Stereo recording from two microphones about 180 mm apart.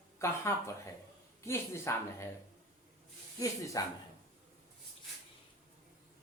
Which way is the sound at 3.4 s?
20° left (ahead or behind).